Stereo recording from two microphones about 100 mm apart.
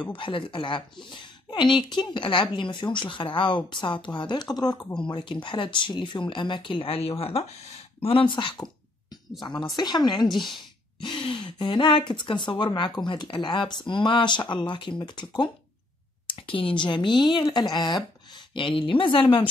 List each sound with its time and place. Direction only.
0.1 s speech: 60° left (ahead or behind); by 7.5 s 85° left
8.0 s speech: 65° left (ahead or behind); by 15.5 s 50° left (ahead or behind)
16.3 s speech: 60° left (ahead or behind)